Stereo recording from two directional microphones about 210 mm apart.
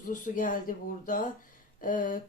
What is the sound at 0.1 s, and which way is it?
Speech, 40° left (ahead or behind).